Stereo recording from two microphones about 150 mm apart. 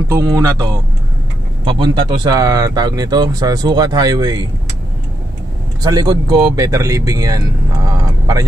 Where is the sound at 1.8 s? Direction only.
30° right (ahead or behind).